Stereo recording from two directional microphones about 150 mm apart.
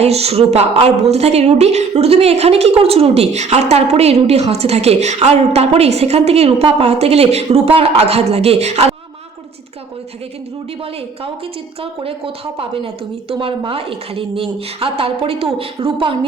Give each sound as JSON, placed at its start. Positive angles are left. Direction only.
{"t": 0.0, "sound": "a woman's voice", "side_deg": -45}
{"t": 11.8, "sound": "a woman's voice", "side_deg": -40}